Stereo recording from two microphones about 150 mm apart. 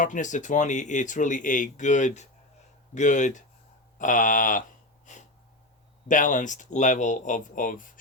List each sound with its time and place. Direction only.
0.0 s speech: 60° left (ahead or behind)
5.1 s a sound: 55° left (ahead or behind)
6.1 s speech: 60° left (ahead or behind)